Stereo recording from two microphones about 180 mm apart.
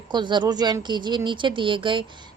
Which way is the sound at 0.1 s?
25° right (ahead or behind).